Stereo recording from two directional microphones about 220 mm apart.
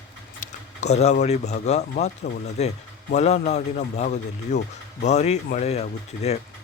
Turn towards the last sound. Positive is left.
turn(degrees=30)  # may be behind; listen again after turning